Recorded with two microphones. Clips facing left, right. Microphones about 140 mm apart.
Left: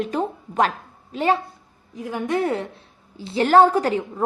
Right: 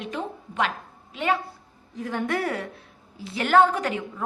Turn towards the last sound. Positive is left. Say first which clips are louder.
# left 4 dB
turn(degrees=35)  # may be behind; listen again after turning